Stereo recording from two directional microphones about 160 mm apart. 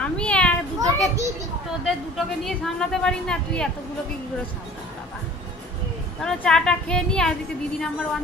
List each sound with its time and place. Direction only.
0.0 s children playing: 5° left (ahead or behind)
0.7 s children playing: 20° right (ahead or behind)
1.9 s a woman's voice: centre (ahead or behind)
6.2 s a woman's voice: 5° left (ahead or behind)